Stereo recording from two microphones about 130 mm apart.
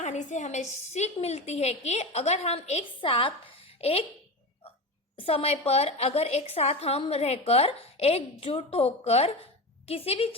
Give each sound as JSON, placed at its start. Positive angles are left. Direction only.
{"t": 0.0, "sound": "a woman's voice", "side_deg": 65}
{"t": 5.1, "sound": "a woman's voice", "side_deg": 45}